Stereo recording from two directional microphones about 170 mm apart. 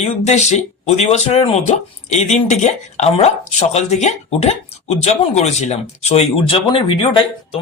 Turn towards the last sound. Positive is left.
turn(degrees=30)  # may be behind; listen again after turning